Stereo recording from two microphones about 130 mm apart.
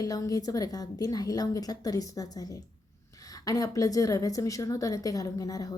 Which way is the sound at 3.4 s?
25° left (ahead or behind).